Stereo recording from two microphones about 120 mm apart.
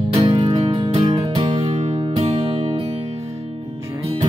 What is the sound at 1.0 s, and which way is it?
Music, 40° right (ahead or behind).